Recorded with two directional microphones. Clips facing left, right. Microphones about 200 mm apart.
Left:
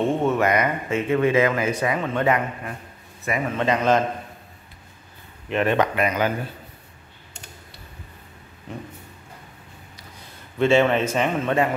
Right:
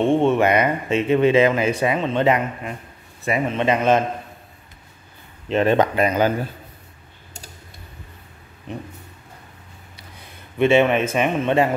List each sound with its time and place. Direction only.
0.2 s speech: 25° right (ahead or behind)
5.5 s speech: 30° right (ahead or behind)
8.7 s speech: 20° right (ahead or behind)
10.6 s a man's voice: 15° right (ahead or behind)